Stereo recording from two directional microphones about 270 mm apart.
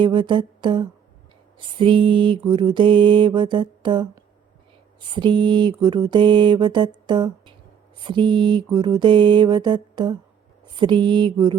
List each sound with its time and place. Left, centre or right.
0.0 s mantra: centre